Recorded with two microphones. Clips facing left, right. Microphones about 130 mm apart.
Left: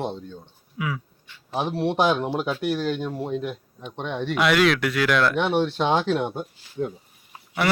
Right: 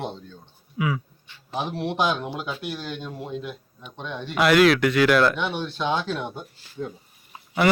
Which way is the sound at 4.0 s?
75° left (ahead or behind).